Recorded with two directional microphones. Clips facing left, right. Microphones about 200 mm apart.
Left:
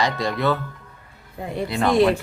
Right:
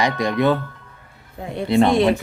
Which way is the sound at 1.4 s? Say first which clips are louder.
Even; centre (ahead or behind).